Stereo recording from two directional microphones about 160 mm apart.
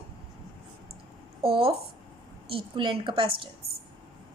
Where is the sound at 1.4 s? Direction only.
35° right (ahead or behind).